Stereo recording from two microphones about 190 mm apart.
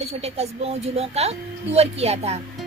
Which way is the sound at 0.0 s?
35° right (ahead or behind).